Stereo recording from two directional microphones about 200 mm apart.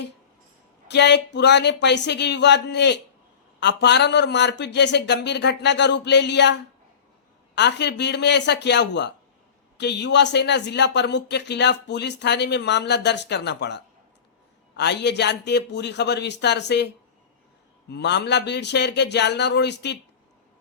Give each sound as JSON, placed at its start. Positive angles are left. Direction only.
{"t": 0.9, "sound": "speech", "side_deg": 60}
{"t": 17.9, "sound": "speech", "side_deg": 60}